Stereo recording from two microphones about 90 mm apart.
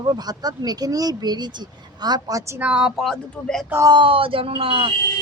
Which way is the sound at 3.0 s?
5° left (ahead or behind).